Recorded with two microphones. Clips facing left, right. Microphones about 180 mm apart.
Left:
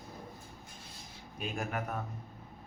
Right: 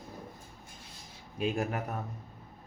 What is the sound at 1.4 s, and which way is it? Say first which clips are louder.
Speech: right 5 dB; 35° right (ahead or behind).